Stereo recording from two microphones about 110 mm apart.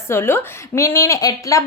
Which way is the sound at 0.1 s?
20° left (ahead or behind).